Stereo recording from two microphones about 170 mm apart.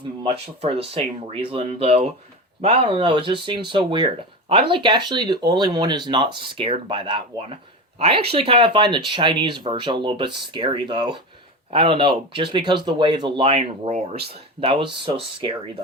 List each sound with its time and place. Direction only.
0.2 s speech: 35° right (ahead or behind)